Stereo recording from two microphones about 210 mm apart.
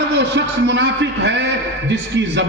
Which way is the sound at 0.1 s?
55° right (ahead or behind).